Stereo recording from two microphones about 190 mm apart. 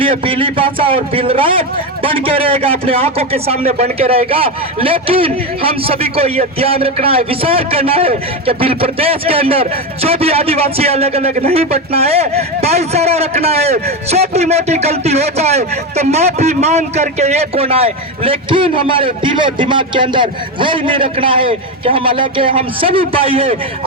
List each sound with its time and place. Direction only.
0.0 s a man's voice: 30° right (ahead or behind)